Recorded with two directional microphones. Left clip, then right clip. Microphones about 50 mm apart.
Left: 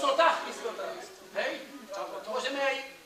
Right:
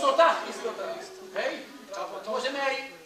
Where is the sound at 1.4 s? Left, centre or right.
Centre.